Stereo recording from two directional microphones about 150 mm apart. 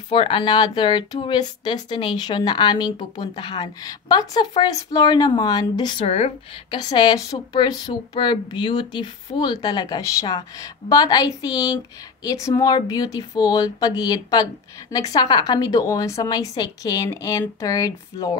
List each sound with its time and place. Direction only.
0.1 s speech: 35° left (ahead or behind)
6.0 s speech: 45° left (ahead or behind)
6.7 s speech: 30° left (ahead or behind)